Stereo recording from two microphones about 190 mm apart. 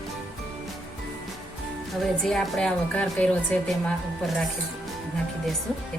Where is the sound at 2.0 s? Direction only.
Centre (ahead or behind).